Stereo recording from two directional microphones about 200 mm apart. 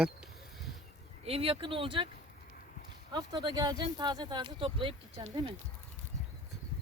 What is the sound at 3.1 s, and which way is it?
Speech, 20° right (ahead or behind).